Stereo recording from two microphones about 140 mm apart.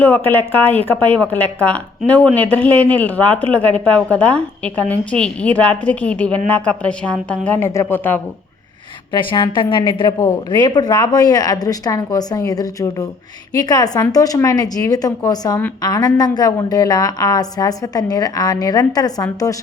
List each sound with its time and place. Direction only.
0.0 s speech: 15° left (ahead or behind)
9.1 s a woman's voice: 35° left (ahead or behind)